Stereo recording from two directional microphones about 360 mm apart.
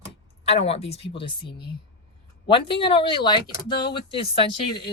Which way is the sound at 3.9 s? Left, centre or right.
Centre.